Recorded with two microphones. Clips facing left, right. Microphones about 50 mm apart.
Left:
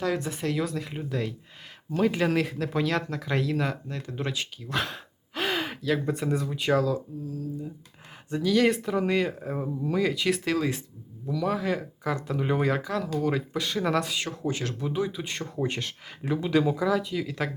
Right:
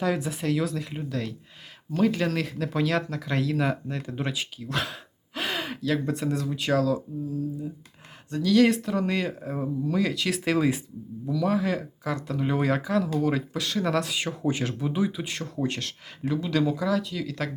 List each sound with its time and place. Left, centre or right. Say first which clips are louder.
0.0 s speech: right 1 dB; centre
8.3 s speech: right 1 dB; centre
8.5 s speech: right 3 dB; centre
10.4 s speech: right 3 dB; centre
11.3 s speech: right 2 dB; centre